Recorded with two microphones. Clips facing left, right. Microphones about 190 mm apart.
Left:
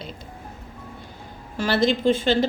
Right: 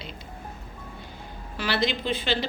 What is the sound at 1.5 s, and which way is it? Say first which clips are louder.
Speech: left 6 dB; 50° left (ahead or behind).